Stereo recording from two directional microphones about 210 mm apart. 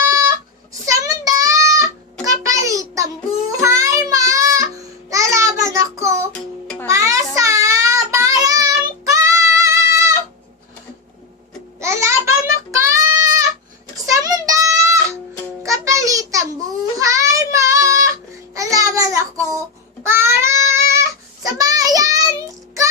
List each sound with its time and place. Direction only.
0.1 s child singing: 15° right (ahead or behind)
6.3 s music: 5° left (ahead or behind)
6.8 s child singing: 15° right (ahead or behind)
11.8 s a sound: 15° right (ahead or behind)
17.0 s child singing: 15° right (ahead or behind)